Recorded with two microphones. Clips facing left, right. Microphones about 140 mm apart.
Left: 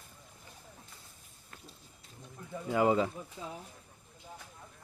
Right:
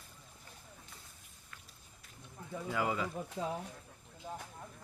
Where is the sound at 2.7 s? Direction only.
30° left (ahead or behind).